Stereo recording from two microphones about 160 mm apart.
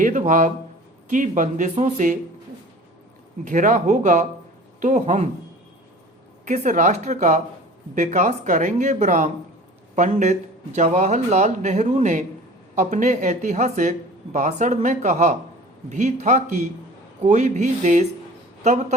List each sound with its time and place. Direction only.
0.0 s a man's voice: 50° right (ahead or behind)
3.4 s speech: 50° right (ahead or behind)
6.5 s a man's voice: 50° right (ahead or behind)